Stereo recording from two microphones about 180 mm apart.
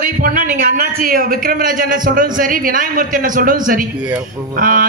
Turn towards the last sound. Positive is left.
turn(degrees=-50)  # may be behind; listen again after turning